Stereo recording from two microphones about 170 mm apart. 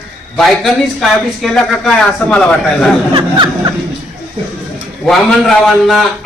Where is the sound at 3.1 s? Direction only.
25° right (ahead or behind).